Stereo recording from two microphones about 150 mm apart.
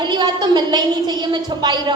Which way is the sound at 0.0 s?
30° right (ahead or behind).